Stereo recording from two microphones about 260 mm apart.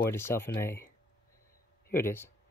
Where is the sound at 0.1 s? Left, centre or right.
Centre.